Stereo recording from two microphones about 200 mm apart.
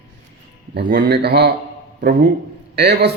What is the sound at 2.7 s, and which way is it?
Speech, 55° right (ahead or behind).